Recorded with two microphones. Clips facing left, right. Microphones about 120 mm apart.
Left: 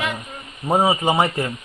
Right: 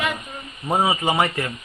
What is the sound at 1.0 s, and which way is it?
Speech, 15° left (ahead or behind).